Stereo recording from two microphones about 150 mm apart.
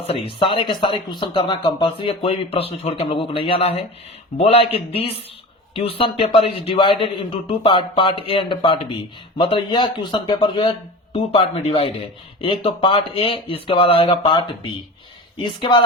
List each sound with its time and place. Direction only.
0.0 s speech: 40° left (ahead or behind)